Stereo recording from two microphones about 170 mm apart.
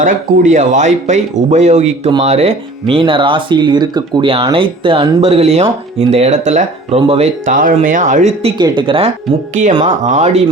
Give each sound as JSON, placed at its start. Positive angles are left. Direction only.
{"t": 0.0, "sound": "speech", "side_deg": -50}
{"t": 7.5, "sound": "speech", "side_deg": -50}
{"t": 9.8, "sound": "speech", "side_deg": -45}